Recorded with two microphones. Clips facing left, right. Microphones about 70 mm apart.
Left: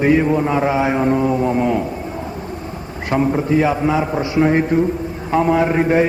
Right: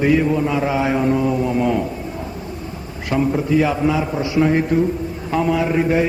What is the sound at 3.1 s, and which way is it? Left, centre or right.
A man's voice, left.